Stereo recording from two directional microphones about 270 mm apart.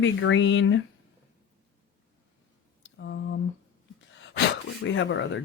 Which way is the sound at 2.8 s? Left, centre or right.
Left.